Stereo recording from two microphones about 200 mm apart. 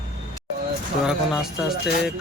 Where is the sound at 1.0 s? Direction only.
Centre (ahead or behind).